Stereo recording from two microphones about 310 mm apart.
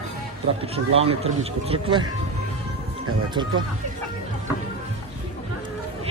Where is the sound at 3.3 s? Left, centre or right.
Centre.